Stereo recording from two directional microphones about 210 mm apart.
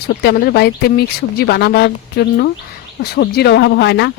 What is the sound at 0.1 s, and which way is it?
Speech, 50° left (ahead or behind).